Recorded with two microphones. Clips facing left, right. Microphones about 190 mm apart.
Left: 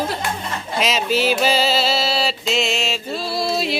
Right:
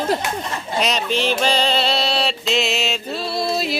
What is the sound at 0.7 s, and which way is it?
Music, centre (ahead or behind).